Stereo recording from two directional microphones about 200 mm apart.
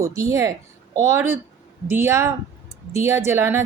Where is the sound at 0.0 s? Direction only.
15° right (ahead or behind).